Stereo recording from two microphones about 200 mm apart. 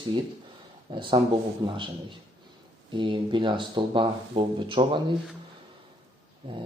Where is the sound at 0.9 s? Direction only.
25° right (ahead or behind).